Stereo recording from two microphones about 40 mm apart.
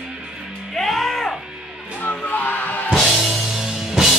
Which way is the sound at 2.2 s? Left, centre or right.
Left.